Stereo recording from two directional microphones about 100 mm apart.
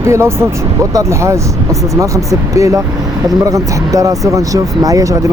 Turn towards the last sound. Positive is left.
turn(degrees=-35)  # may be behind; listen again after turning